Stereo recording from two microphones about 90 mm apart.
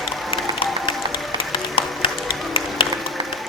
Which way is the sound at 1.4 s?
85° left.